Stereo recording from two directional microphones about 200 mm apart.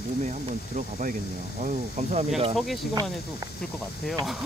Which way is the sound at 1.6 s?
35° right (ahead or behind).